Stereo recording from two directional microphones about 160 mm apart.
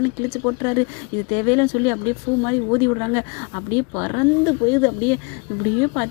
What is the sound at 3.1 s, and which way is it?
Speech, 15° left (ahead or behind).